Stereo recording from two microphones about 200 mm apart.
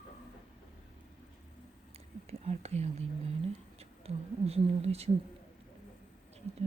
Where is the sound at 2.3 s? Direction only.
35° right (ahead or behind).